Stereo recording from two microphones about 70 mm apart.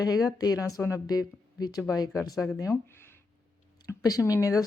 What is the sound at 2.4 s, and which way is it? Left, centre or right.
Speech, left.